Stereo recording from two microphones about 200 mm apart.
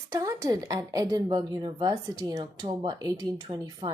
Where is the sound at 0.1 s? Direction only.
15° right (ahead or behind).